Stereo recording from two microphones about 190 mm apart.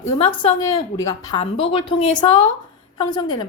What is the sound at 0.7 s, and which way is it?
A woman's voice, 20° left (ahead or behind).